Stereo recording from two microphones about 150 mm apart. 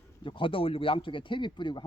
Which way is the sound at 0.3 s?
35° left (ahead or behind).